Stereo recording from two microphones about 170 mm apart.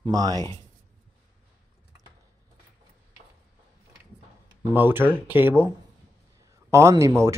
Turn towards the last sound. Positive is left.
turn(degrees=-15)  # may be behind; listen again after turning